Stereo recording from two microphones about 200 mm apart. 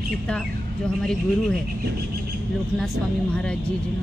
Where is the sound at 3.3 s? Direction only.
5° left (ahead or behind).